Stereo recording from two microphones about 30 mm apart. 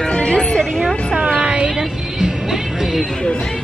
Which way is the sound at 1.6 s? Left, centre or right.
Right.